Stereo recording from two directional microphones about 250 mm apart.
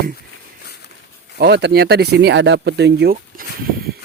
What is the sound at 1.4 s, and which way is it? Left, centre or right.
Speech, right.